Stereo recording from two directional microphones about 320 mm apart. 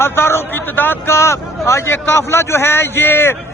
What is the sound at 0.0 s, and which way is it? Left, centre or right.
A man's voice, centre.